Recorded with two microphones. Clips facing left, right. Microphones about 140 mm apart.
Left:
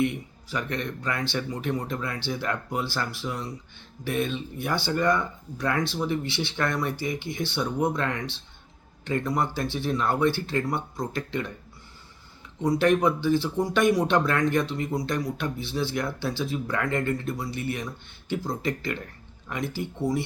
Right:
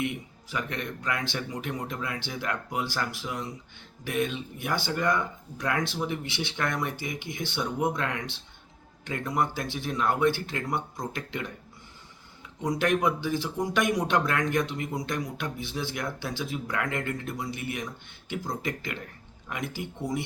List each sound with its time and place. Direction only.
0.5 s a man's voice: 20° right (ahead or behind)
12.6 s speech: 15° right (ahead or behind)